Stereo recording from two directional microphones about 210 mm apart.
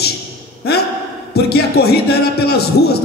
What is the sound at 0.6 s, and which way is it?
A man's voice, 50° left (ahead or behind).